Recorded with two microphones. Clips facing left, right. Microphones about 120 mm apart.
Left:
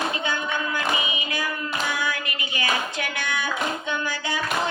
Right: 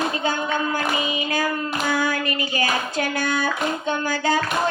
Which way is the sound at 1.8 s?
40° right (ahead or behind).